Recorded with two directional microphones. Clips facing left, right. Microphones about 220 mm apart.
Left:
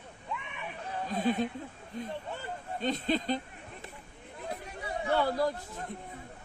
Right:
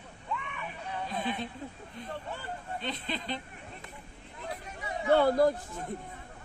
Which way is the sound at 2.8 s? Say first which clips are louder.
Left 9 dB; 45° left (ahead or behind).